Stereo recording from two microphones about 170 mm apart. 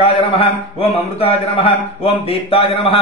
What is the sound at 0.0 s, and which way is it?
A man's voice, 35° left (ahead or behind).